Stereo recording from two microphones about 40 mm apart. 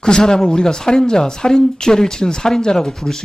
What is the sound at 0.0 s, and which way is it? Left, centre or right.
Speech, centre.